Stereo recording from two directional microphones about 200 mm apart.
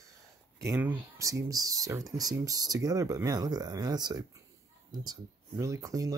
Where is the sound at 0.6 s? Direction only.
15° right (ahead or behind).